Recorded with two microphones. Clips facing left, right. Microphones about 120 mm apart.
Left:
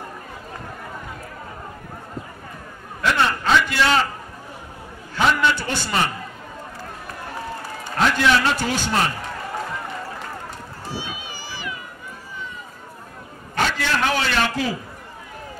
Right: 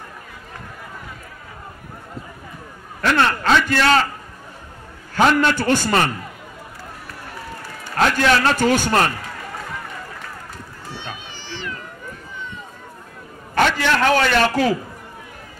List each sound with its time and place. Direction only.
3.0 s a man's voice: 50° right (ahead or behind)
5.1 s a man's voice: 45° right (ahead or behind)
8.0 s a man's voice: 50° right (ahead or behind)
11.1 s cat: 10° left (ahead or behind)
13.6 s a man's voice: 55° right (ahead or behind)